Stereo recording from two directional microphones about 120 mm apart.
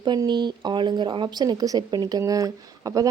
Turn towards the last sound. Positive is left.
turn(degrees=-30)  # may be behind; listen again after turning